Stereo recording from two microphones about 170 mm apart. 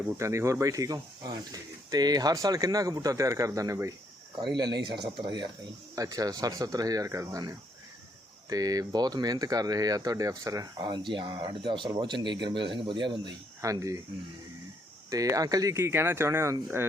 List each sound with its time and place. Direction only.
0.2 s speech: 15° right (ahead or behind)
15.1 s speech: 20° right (ahead or behind)